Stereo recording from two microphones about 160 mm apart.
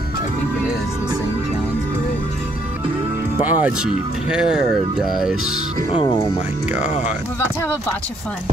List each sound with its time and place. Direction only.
3.3 s speech: 10° right (ahead or behind)
6.8 s speech: 45° left (ahead or behind)